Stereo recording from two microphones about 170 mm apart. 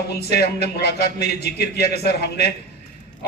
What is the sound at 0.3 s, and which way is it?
A man's voice, 75° left (ahead or behind).